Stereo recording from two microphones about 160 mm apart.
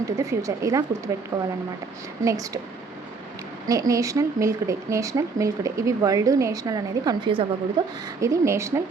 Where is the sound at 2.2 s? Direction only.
20° right (ahead or behind).